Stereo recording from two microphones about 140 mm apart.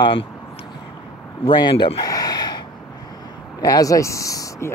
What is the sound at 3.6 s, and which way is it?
Speech, 25° left (ahead or behind).